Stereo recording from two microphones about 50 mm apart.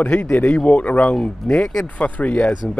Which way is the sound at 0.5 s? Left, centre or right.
Centre.